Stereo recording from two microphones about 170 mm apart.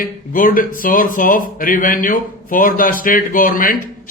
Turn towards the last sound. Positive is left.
turn(degrees=55)  # may be behind; listen again after turning